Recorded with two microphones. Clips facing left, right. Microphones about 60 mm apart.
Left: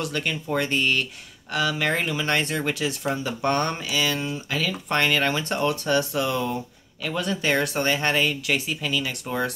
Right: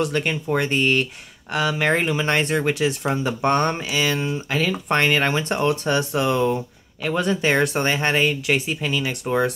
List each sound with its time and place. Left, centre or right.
0.0 s speech: right